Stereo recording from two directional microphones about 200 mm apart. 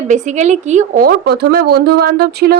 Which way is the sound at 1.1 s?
55° right (ahead or behind).